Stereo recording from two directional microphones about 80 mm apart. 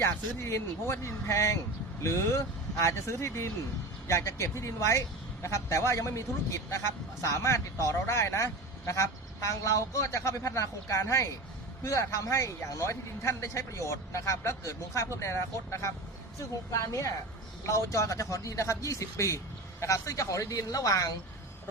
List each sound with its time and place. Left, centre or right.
0.0 s a man's voice: left